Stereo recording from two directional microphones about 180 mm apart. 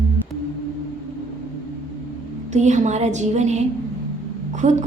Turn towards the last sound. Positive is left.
turn(degrees=-40)  # may be behind; listen again after turning